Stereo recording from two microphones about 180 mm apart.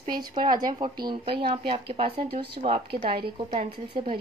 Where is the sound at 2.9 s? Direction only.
60° right (ahead or behind).